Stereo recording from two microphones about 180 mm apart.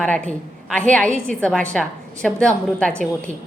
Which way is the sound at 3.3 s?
40° right (ahead or behind).